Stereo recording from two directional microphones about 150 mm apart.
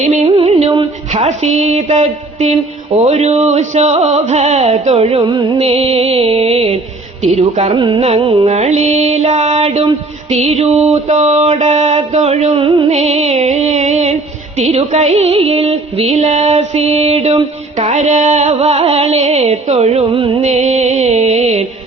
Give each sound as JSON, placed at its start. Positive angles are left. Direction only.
{"t": 0.0, "sound": "music", "side_deg": -45}
{"t": 1.1, "sound": "carnatic music", "side_deg": -50}
{"t": 5.5, "sound": "music", "side_deg": -45}
{"t": 7.2, "sound": "carnatic music", "side_deg": -45}
{"t": 7.8, "sound": "carnatic music", "side_deg": -35}
{"t": 12.9, "sound": "carnatic music", "side_deg": -50}
{"t": 20.4, "sound": "carnatic music", "side_deg": -50}